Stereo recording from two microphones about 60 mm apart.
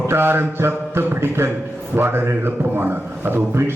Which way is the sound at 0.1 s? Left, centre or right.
Right.